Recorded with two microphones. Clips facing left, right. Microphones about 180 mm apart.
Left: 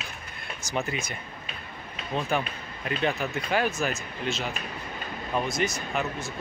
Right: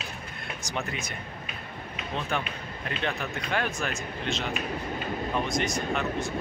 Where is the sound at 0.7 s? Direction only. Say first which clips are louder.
Left 4 dB; centre (ahead or behind).